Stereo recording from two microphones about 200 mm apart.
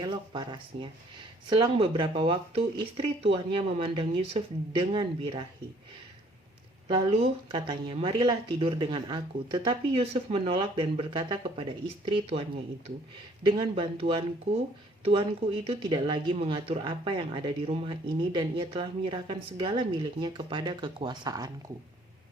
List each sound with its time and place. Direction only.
0.0 s speech: 25° right (ahead or behind)
6.8 s speech: 25° right (ahead or behind)
15.6 s speech: 25° right (ahead or behind)